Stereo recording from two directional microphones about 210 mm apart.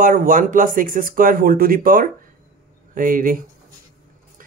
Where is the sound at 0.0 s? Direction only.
40° right (ahead or behind).